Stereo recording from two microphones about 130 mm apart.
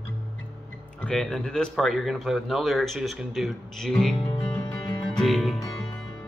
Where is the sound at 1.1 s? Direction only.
5° left (ahead or behind).